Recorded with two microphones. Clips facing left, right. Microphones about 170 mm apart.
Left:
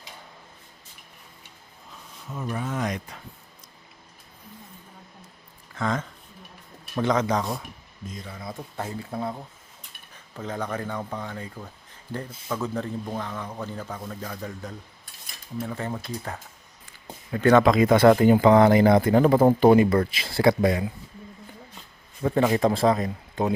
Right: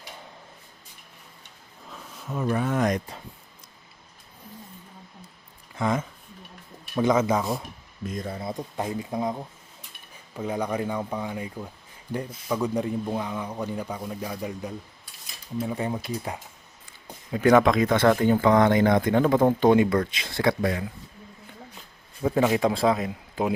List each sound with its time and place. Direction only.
2.3 s speech: 65° right (ahead or behind); by 3.0 s 50° right (ahead or behind)
5.7 s a man's voice: 10° right (ahead or behind)
8.0 s speech: 55° right (ahead or behind)
8.3 s speech: 30° right (ahead or behind)
8.5 s a man's voice: 15° right (ahead or behind)
17.6 s speech: 5° left (ahead or behind)
22.2 s a man's voice: centre (ahead or behind)